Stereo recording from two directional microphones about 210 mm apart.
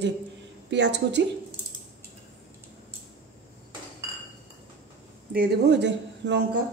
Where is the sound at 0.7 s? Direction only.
55° right (ahead or behind).